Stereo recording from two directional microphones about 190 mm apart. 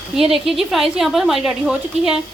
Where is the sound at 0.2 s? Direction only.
Centre (ahead or behind).